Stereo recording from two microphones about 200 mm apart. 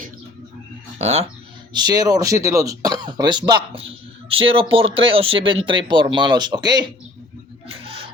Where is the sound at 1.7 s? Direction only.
20° right (ahead or behind).